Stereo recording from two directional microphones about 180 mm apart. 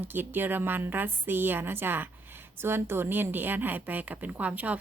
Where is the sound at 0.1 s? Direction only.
10° right (ahead or behind).